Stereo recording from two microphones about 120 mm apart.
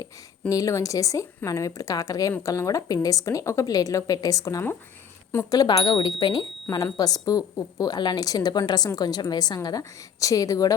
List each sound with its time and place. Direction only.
0.0 s a woman's voice: 30° left (ahead or behind)